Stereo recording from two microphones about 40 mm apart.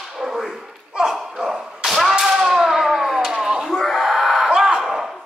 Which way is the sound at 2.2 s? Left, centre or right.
Centre.